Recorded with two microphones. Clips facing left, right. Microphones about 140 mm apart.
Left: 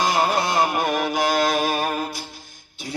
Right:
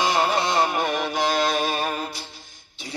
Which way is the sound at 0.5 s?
10° left (ahead or behind).